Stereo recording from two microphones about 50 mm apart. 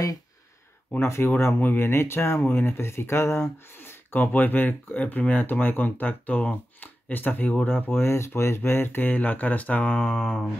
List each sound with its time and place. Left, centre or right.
1.0 s speech: left
1.6 s speech: left
3.7 s speech: left